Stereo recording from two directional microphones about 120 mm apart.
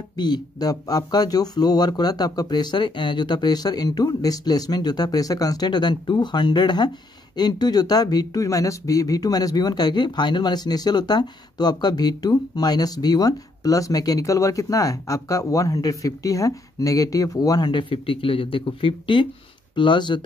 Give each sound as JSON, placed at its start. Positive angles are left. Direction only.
{"t": 0.2, "sound": "speech", "side_deg": 35}